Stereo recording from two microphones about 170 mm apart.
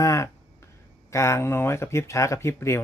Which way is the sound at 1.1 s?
15° left (ahead or behind).